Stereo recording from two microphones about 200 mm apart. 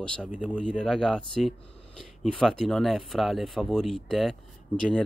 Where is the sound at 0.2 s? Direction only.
5° right (ahead or behind).